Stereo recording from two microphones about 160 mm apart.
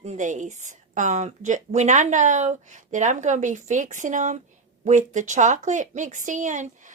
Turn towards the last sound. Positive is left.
turn(degrees=-50)  # may be behind; listen again after turning